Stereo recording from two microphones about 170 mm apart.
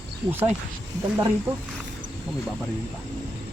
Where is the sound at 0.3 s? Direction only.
10° right (ahead or behind).